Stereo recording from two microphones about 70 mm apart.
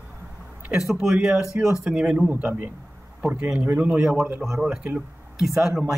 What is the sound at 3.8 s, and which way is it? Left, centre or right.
Speech, right.